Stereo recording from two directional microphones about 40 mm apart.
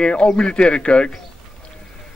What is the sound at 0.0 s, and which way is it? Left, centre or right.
A man's voice, left.